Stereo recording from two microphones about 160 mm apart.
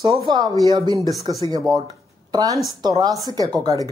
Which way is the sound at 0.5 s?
25° right (ahead or behind).